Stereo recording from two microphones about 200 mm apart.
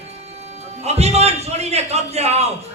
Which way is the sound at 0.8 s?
30° right (ahead or behind).